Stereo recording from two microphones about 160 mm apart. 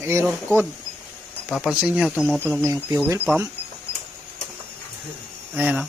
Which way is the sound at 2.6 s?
20° right (ahead or behind).